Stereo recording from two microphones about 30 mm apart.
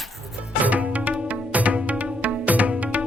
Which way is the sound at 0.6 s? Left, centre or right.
Right.